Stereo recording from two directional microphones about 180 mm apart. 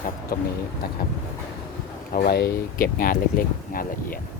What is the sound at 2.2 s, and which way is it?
Speech, 65° left (ahead or behind).